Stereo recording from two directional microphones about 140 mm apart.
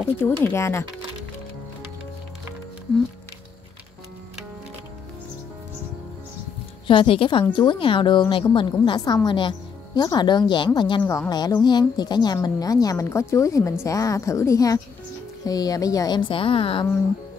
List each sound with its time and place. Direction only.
0.2 s a woman's voice: 15° left (ahead or behind)
6.9 s a woman's voice: 40° left (ahead or behind)
11.0 s a woman's voice: 20° left (ahead or behind); by 16.8 s 35° left (ahead or behind)